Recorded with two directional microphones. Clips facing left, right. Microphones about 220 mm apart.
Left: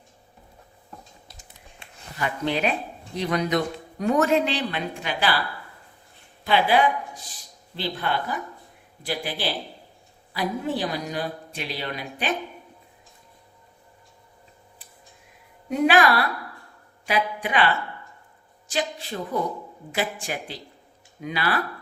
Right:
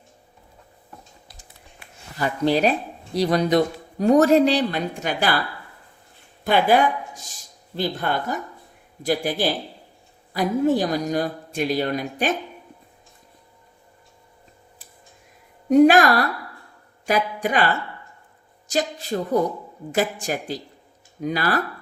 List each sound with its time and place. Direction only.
2.1 s speech: 35° right (ahead or behind)
6.4 s a woman's voice: 50° right (ahead or behind)
15.7 s a woman's voice: 45° right (ahead or behind)
18.7 s a woman's voice: 40° right (ahead or behind)